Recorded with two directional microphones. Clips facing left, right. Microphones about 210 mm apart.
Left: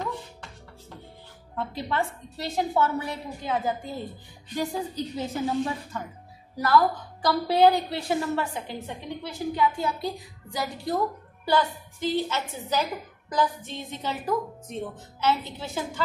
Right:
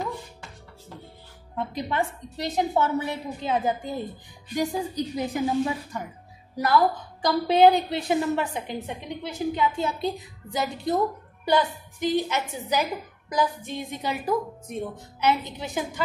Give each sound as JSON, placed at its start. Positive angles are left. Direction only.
{"t": 1.5, "sound": "a woman's voice", "side_deg": -15}